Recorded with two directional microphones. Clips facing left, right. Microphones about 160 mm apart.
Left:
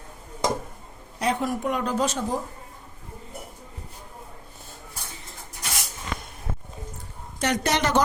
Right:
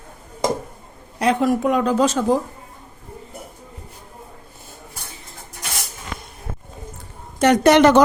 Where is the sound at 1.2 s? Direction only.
90° right.